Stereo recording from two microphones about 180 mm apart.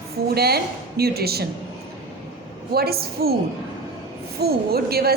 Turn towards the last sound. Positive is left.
turn(degrees=-60)  # may be behind; listen again after turning